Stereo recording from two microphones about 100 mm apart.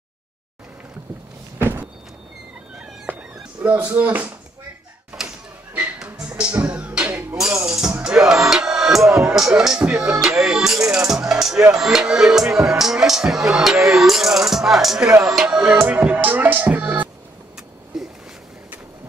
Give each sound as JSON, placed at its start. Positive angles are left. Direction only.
{"t": 1.6, "sound": "door", "side_deg": -20}
{"t": 2.8, "sound": "cat", "side_deg": -10}
{"t": 6.2, "sound": "music", "side_deg": -10}
{"t": 9.2, "sound": "speech", "side_deg": -5}
{"t": 15.2, "sound": "music", "side_deg": -5}
{"t": 17.9, "sound": "a sound", "side_deg": -5}